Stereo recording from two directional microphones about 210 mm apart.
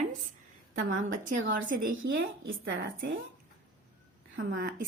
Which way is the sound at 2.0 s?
65° right (ahead or behind).